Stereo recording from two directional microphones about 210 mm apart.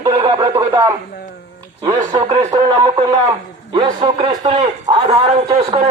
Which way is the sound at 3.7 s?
25° right (ahead or behind).